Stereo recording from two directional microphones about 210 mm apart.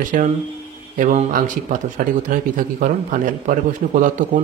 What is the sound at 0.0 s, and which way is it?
Speech, 40° right (ahead or behind).